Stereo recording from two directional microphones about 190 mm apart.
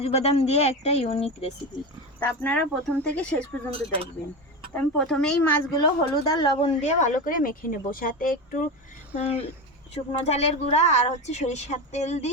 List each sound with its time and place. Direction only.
0.0 s speech: 35° left (ahead or behind)
2.1 s speech: 10° left (ahead or behind)
3.7 s speech: 30° right (ahead or behind)
4.7 s speech: 5° left (ahead or behind)
5.8 s speech: 20° left (ahead or behind); by 8.6 s 45° left (ahead or behind)
9.1 s speech: 35° left (ahead or behind)